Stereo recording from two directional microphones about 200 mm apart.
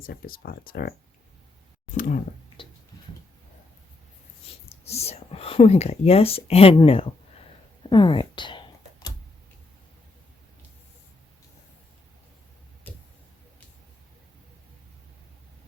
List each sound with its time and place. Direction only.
0.0 s speech: 45° left (ahead or behind)
2.0 s speech: 40° left (ahead or behind)
4.7 s speech: 30° left (ahead or behind)
7.9 s computer keyboard: 25° left (ahead or behind)